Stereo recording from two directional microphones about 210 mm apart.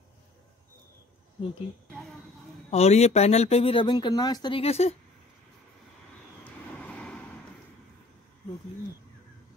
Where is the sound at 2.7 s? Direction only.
30° left (ahead or behind).